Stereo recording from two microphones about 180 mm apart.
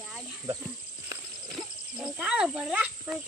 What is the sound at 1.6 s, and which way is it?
Speech, 5° right (ahead or behind).